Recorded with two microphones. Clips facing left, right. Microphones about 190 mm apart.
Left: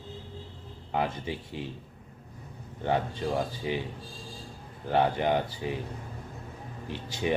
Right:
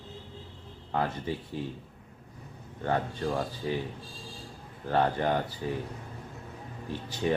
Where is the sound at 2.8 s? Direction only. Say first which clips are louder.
Left 1 dB; 15° left (ahead or behind).